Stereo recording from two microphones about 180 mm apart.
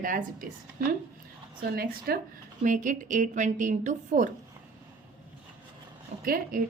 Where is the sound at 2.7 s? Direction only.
45° right (ahead or behind).